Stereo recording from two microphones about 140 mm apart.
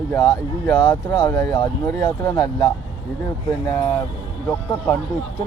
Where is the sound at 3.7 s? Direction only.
20° left (ahead or behind).